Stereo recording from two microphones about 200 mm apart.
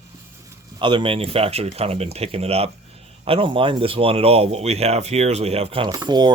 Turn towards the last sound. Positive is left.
turn(degrees=-20)  # may be behind; listen again after turning